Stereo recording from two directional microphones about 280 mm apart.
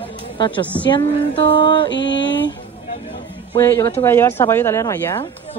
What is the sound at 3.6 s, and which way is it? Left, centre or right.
Speech, centre.